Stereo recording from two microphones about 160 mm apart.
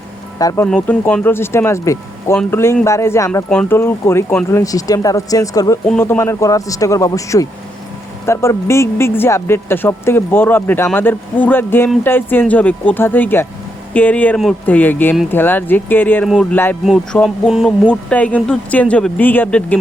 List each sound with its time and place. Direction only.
0.3 s speech: 20° left (ahead or behind)
0.7 s speech: 10° left (ahead or behind)
3.5 s speech: 5° left (ahead or behind)